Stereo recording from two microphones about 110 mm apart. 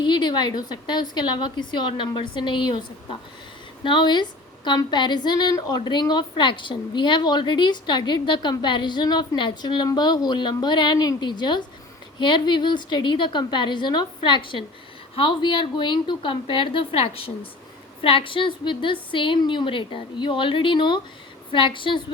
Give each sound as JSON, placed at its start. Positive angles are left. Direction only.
{"t": 0.0, "sound": "a woman's voice", "side_deg": 40}